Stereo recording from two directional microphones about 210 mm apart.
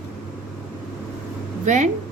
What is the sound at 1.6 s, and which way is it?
Speech, 35° right (ahead or behind).